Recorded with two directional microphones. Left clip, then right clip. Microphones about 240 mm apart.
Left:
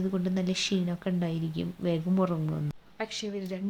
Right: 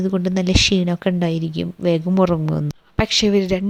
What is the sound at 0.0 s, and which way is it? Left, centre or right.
A woman's voice, right.